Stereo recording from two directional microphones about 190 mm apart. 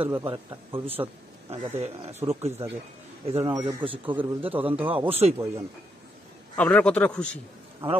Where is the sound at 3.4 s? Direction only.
25° right (ahead or behind).